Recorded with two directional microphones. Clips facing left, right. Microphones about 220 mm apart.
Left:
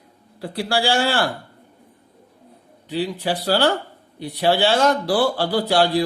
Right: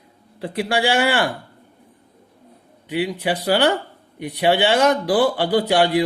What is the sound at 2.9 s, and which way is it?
Speech, 15° right (ahead or behind).